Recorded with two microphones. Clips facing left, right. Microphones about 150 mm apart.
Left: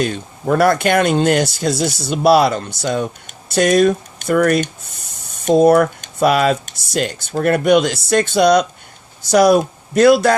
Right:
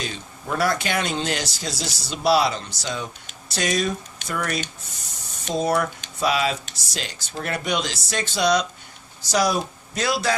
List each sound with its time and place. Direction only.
0.0 s speech: 55° left (ahead or behind)